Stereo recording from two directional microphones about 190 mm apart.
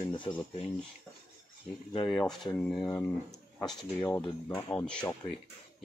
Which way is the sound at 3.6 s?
10° left (ahead or behind).